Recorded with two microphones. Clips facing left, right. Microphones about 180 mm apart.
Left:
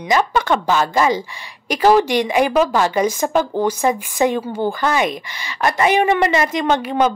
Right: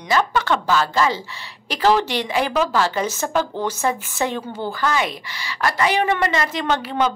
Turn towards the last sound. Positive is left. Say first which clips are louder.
# left 4 dB
turn(degrees=15)  # may be behind; listen again after turning